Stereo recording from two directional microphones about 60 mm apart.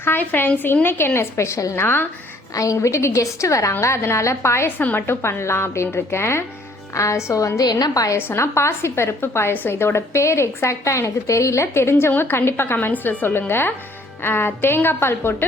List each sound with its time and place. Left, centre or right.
0.0 s a woman's voice: left
1.7 s a woman's voice: left
2.6 s a woman's voice: left
6.9 s a woman's voice: left
8.3 s a woman's voice: left